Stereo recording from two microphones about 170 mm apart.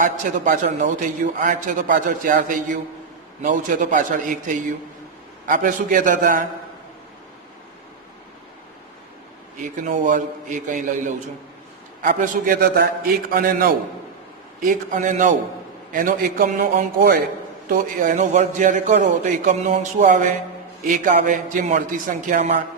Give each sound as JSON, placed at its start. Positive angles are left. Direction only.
{"t": 0.0, "sound": "a man's voice", "side_deg": -50}
{"t": 9.6, "sound": "a man's voice", "side_deg": -50}
{"t": 17.7, "sound": "a man's voice", "side_deg": -50}